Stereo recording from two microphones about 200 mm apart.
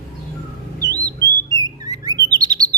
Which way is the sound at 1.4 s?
20° right (ahead or behind).